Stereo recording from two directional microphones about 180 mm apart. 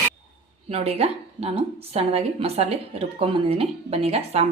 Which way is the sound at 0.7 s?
35° right (ahead or behind).